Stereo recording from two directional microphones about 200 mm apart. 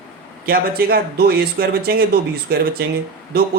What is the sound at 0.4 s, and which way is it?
Speech, 50° right (ahead or behind).